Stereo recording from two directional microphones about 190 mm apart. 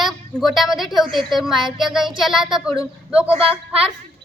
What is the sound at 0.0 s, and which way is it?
A woman's voice, centre (ahead or behind).